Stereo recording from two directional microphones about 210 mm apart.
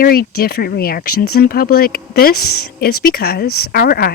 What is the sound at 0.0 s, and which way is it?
Speech, 45° left (ahead or behind).